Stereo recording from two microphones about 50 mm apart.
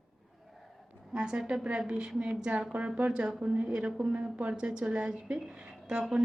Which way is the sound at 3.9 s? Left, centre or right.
Centre.